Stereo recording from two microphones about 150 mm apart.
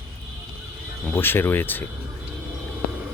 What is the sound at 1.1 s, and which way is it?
Speech, 15° left (ahead or behind).